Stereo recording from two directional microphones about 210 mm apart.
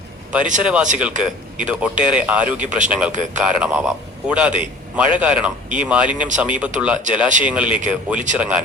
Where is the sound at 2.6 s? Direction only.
35° right (ahead or behind).